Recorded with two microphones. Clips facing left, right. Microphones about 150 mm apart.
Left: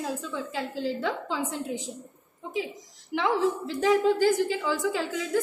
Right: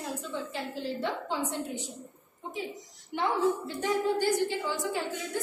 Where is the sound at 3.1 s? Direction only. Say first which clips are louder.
Left 2 dB; 90° left.